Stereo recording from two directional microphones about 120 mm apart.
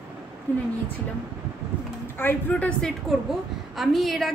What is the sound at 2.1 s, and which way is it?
Speech, 15° left (ahead or behind).